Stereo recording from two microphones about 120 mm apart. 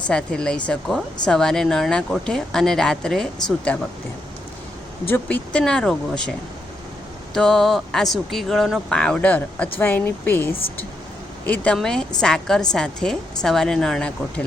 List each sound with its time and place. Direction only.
0.1 s speech: 5° left (ahead or behind)
5.0 s speech: 15° left (ahead or behind)
7.3 s speech: 5° left (ahead or behind)